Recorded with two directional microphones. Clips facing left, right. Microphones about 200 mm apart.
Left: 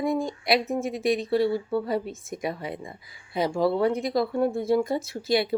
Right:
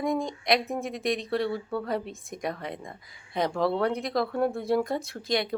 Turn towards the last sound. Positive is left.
turn(degrees=5)  # may be behind; listen again after turning